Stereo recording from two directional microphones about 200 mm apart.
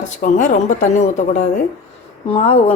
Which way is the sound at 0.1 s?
40° left (ahead or behind).